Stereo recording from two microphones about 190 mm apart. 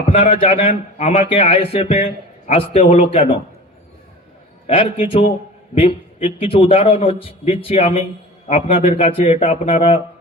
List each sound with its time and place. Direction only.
0.1 s a man's voice: 30° left (ahead or behind)
4.6 s a man's voice: 30° left (ahead or behind)